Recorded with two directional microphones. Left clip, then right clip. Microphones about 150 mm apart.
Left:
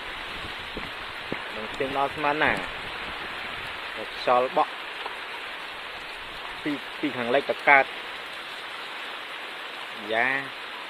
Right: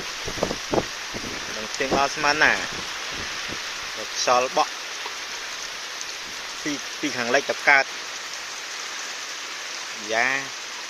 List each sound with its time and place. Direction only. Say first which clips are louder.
2.0 s speech: right 4 dB; 5° right (ahead or behind)
4.3 s speech: right 1 dB; 5° right (ahead or behind)
7.2 s speech: right 2 dB; 10° right (ahead or behind)
10.1 s speech: right 2 dB; centre (ahead or behind)